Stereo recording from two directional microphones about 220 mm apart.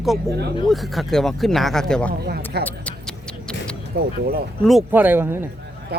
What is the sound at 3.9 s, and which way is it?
Speech, 45° right (ahead or behind).